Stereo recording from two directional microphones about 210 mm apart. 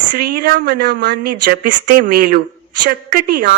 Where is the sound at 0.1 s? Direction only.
45° right (ahead or behind).